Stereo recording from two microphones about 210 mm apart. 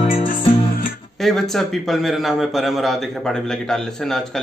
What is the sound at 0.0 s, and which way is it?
Music, 25° left (ahead or behind).